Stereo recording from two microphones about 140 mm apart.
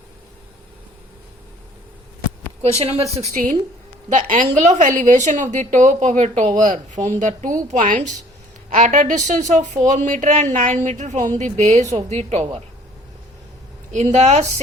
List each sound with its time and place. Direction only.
2.7 s a woman's voice: 45° right (ahead or behind)
3.3 s a woman's voice: 65° right (ahead or behind)
13.9 s a woman's voice: 55° right (ahead or behind)